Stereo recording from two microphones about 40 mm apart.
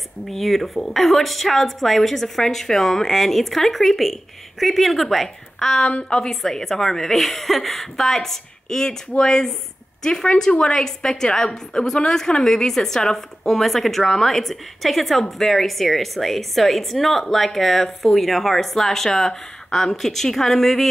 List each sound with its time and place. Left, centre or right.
0.3 s a woman's voice: centre
5.8 s a woman's voice: left
6.4 s a woman's voice: centre